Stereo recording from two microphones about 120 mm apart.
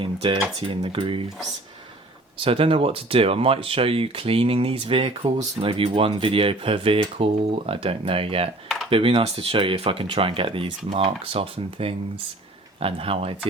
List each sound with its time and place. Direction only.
0.0 s typing: 50° right (ahead or behind)
0.7 s speech: 45° right (ahead or behind)
2.4 s speech: 50° right (ahead or behind)